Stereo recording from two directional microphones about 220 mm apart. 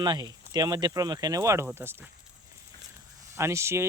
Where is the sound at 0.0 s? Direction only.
20° right (ahead or behind).